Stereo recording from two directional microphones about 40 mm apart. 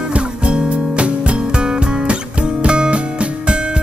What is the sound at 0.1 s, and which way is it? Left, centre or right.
Music, right.